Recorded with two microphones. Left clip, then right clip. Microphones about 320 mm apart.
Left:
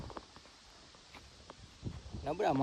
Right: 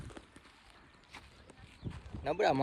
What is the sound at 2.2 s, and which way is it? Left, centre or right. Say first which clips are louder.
Speech: right 3 dB; centre.